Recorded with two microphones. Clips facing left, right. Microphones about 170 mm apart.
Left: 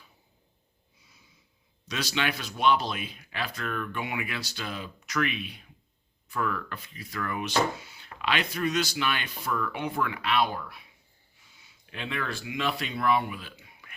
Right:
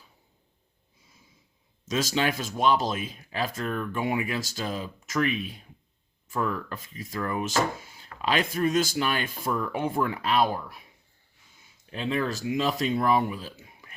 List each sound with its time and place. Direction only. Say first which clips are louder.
1.8 s speech: right 5 dB; 45° right (ahead or behind)
11.9 s speech: right 6 dB; 35° right (ahead or behind)